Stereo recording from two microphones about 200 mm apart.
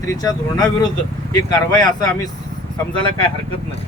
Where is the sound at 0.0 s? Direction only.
20° left (ahead or behind).